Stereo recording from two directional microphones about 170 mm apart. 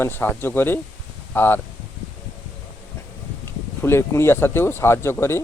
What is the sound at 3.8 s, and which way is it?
Speech, 15° left (ahead or behind).